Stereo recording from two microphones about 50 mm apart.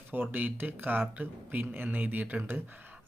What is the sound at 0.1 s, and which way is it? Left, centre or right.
Speech, right.